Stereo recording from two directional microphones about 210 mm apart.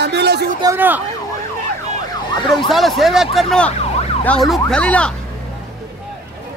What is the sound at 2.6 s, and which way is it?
A man's voice, centre (ahead or behind).